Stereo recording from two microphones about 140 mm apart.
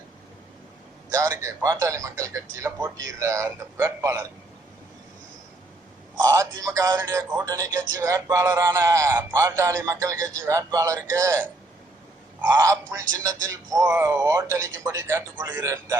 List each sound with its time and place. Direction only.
1.1 s speech: 20° right (ahead or behind)
6.1 s speech: 25° right (ahead or behind)